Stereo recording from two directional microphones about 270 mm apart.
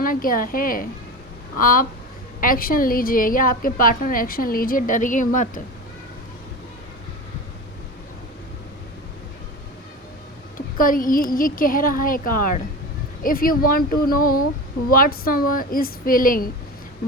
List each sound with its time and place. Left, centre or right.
0.0 s a woman's voice: left
10.8 s a woman's voice: left